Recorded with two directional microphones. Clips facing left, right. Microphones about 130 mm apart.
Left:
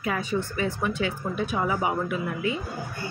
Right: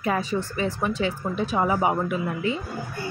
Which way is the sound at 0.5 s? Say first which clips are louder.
Right 1 dB; 25° right (ahead or behind).